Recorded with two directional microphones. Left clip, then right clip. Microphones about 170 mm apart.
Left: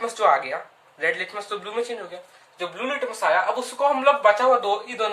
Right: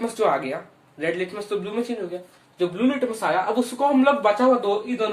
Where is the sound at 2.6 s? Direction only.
25° right (ahead or behind).